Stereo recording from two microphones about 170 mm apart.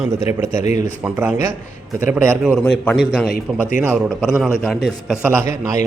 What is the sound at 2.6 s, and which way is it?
A man's voice, 5° left (ahead or behind).